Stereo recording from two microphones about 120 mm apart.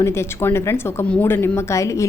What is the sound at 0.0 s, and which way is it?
A woman's voice, 20° left (ahead or behind).